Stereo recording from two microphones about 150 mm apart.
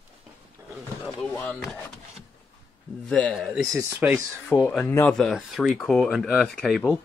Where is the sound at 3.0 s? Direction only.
10° left (ahead or behind).